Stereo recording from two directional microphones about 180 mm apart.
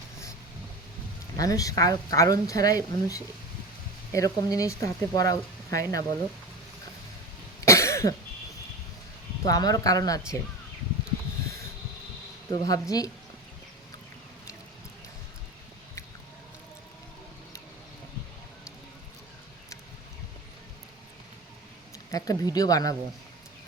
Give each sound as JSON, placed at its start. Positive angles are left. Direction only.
{"t": 1.4, "sound": "speech", "side_deg": 20}
{"t": 7.6, "sound": "cough", "side_deg": 15}
{"t": 9.4, "sound": "speech", "side_deg": 20}
{"t": 12.5, "sound": "speech", "side_deg": 20}
{"t": 21.9, "sound": "speech", "side_deg": 20}